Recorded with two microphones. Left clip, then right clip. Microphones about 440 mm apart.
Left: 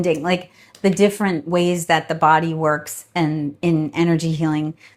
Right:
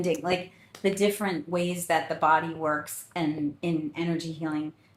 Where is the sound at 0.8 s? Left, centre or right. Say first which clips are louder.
Left 8 dB; left.